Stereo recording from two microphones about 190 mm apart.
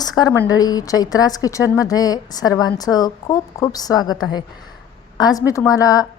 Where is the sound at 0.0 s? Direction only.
20° left (ahead or behind).